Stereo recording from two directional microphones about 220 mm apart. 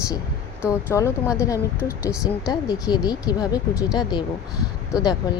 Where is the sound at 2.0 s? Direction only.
5° right (ahead or behind).